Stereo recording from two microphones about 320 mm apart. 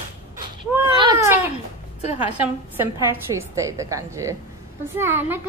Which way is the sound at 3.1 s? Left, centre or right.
Centre.